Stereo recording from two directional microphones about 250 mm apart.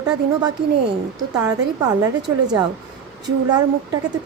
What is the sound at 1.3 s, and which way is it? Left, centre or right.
A woman's voice, centre.